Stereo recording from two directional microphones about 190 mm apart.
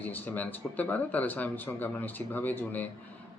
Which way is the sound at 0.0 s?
10° left (ahead or behind).